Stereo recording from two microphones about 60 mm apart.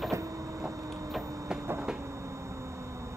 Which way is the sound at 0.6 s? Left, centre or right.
Centre.